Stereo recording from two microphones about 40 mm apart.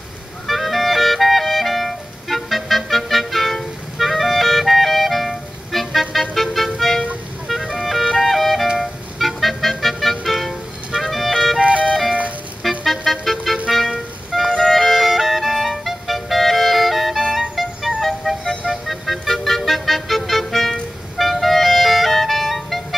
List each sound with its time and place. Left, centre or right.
0.5 s clarinet: centre
6.3 s music: centre
7.7 s music: centre
11.6 s music: right
12.6 s music: centre
21.2 s clarinet: centre